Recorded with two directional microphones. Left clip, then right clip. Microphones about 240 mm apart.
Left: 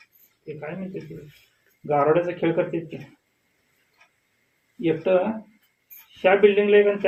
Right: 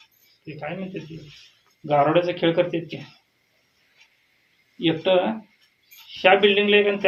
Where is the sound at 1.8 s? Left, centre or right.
Right.